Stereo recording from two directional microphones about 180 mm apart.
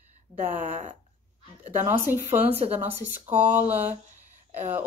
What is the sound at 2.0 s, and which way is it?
A woman's voice, 10° right (ahead or behind).